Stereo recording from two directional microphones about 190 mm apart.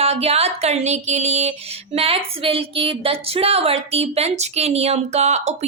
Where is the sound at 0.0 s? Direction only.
35° right (ahead or behind).